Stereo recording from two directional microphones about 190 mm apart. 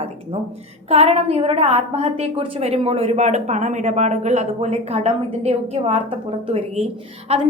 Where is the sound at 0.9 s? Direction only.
35° right (ahead or behind).